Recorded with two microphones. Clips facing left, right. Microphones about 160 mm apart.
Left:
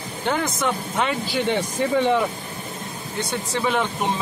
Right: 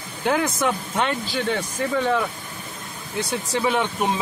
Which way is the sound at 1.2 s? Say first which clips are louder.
Left 2 dB; 20° left (ahead or behind).